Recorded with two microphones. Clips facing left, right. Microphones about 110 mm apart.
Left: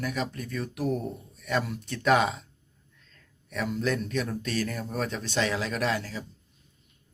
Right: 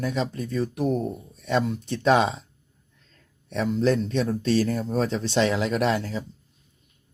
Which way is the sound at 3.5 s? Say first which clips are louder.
Right 6 dB; 30° right (ahead or behind).